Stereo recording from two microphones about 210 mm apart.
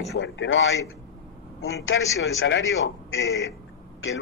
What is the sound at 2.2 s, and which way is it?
A man's voice, 65° left (ahead or behind).